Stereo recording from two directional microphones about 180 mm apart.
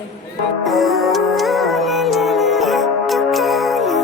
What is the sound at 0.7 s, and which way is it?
Music, centre (ahead or behind).